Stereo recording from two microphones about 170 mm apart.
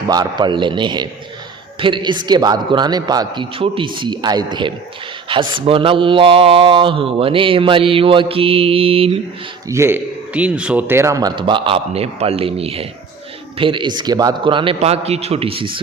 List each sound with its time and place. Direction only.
0.1 s a man's voice: 25° right (ahead or behind)
9.6 s a man's voice: 15° right (ahead or behind); by 15.8 s 30° right (ahead or behind)